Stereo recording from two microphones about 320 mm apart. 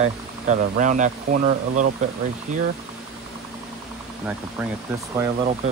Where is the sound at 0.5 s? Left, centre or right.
Right.